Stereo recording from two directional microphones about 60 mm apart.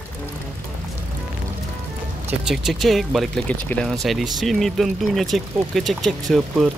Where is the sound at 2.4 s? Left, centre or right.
Centre.